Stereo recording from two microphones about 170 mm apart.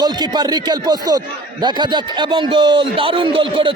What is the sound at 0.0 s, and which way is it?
Speech, 25° right (ahead or behind).